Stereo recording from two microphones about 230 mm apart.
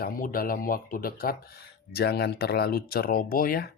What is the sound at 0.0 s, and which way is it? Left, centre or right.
Speech, left.